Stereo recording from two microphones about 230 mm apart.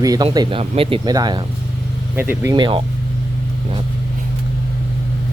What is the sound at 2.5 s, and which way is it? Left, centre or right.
Speech, right.